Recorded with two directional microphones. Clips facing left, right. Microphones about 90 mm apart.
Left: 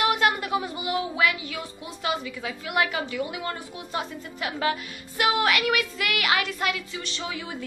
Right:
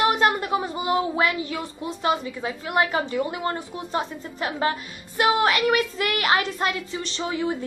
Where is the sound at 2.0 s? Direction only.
35° right (ahead or behind).